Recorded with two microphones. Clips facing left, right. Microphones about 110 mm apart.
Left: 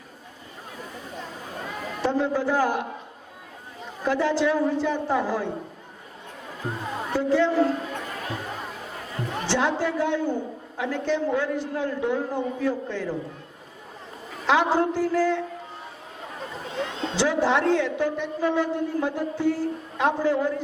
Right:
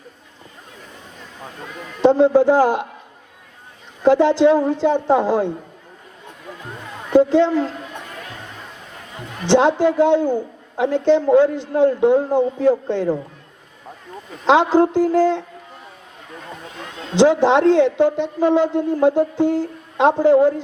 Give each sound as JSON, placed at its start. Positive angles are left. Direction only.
{"t": 2.0, "sound": "a man's voice", "side_deg": -20}
{"t": 4.0, "sound": "a man's voice", "side_deg": -20}
{"t": 6.8, "sound": "music", "side_deg": 25}
{"t": 7.1, "sound": "a man's voice", "side_deg": -20}
{"t": 9.1, "sound": "a man's voice", "side_deg": -20}
{"t": 14.4, "sound": "a man's voice", "side_deg": -20}
{"t": 17.2, "sound": "a man's voice", "side_deg": -20}